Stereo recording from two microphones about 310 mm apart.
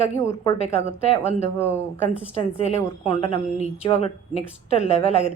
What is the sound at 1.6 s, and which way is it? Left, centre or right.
Speech, centre.